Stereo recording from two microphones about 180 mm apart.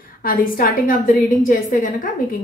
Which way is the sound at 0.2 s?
50° left (ahead or behind).